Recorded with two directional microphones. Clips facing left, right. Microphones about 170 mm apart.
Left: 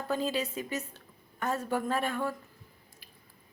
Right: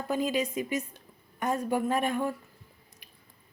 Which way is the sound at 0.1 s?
15° right (ahead or behind).